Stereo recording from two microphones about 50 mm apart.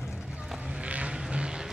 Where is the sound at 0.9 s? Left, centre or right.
Right.